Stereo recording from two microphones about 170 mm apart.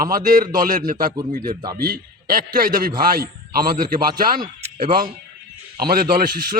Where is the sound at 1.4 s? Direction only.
25° right (ahead or behind).